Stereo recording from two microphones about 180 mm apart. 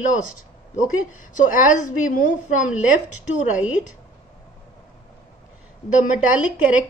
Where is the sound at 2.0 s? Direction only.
50° left (ahead or behind).